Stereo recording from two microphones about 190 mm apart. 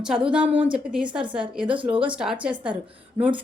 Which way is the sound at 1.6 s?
25° right (ahead or behind).